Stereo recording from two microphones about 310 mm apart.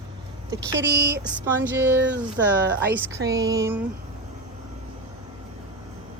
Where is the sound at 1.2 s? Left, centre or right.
Centre.